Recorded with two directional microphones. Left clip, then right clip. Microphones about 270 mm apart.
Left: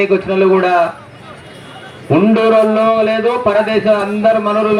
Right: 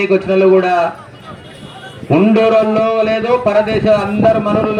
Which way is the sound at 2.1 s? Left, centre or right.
Right.